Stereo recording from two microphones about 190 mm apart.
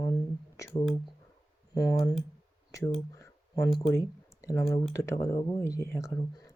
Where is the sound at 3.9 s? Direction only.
15° left (ahead or behind).